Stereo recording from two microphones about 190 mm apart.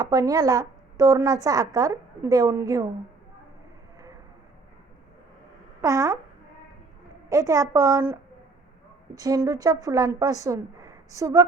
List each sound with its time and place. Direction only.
0.0 s a woman's voice: 20° right (ahead or behind)
5.8 s a woman's voice: 15° right (ahead or behind)
7.3 s a woman's voice: 15° right (ahead or behind)